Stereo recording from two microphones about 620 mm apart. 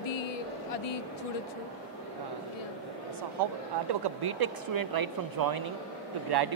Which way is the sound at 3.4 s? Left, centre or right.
Right.